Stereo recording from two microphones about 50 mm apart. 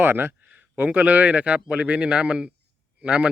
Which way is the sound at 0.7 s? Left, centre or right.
Right.